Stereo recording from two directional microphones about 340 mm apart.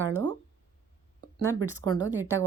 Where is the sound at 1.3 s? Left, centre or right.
Right.